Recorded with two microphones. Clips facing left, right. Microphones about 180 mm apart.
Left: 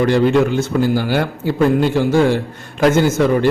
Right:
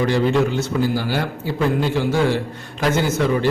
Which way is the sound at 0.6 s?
50° left (ahead or behind).